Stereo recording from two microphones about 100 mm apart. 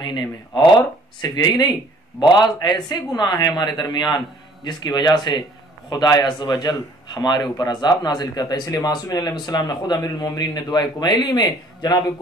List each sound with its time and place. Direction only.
0.0 s speech: 50° left (ahead or behind)